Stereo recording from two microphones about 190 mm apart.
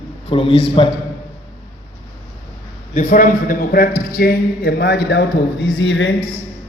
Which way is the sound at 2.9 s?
45° left (ahead or behind).